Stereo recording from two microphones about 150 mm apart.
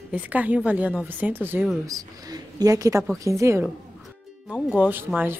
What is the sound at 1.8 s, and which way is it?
Speech, 25° right (ahead or behind).